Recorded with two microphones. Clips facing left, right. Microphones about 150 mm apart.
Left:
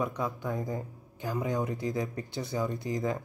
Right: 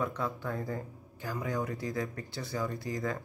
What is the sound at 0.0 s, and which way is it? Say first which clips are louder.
Speech: left 2 dB; 15° left (ahead or behind).